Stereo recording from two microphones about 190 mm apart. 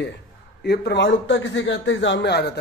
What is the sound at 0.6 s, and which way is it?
A man's voice, 60° left (ahead or behind).